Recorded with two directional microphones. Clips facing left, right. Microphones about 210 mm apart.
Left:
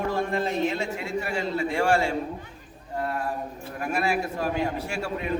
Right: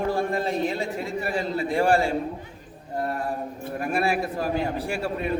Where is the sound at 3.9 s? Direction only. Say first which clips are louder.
Right 1 dB; 35° right (ahead or behind).